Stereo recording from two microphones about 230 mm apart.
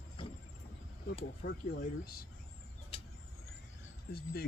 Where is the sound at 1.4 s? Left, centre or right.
Left.